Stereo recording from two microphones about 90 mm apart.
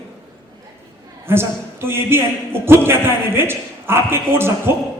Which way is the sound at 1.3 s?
25° right (ahead or behind).